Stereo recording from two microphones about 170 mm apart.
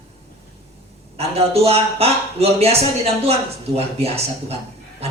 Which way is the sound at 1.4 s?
35° right (ahead or behind).